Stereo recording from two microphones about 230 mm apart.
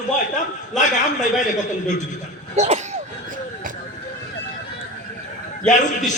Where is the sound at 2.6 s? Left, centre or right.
Right.